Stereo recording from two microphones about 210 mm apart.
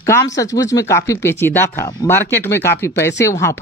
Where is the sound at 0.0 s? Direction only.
15° left (ahead or behind).